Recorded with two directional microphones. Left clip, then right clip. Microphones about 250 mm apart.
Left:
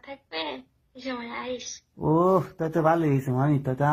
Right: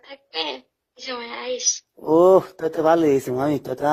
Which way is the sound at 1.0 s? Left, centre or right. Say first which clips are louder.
Right 4 dB; right.